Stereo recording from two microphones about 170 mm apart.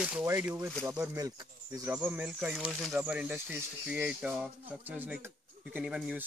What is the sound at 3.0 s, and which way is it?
Speech, 10° right (ahead or behind).